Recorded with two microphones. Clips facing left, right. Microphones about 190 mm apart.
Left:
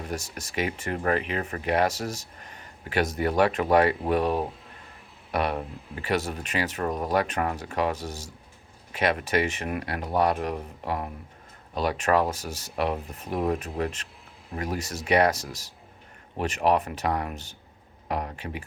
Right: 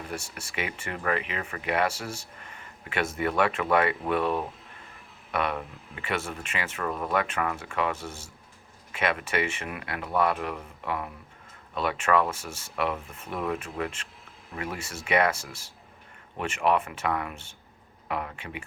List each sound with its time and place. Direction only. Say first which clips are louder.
0.1 s speech: left 3 dB; 40° left (ahead or behind)